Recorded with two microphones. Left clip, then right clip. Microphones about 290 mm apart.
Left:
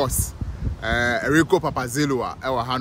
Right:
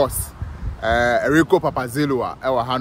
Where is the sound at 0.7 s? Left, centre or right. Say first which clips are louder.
Right 5 dB; centre.